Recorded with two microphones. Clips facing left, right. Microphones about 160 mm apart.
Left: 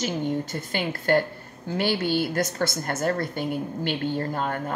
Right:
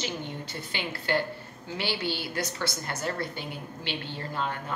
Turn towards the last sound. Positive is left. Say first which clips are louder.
# left 6 dB
turn(degrees=50)  # may be behind; listen again after turning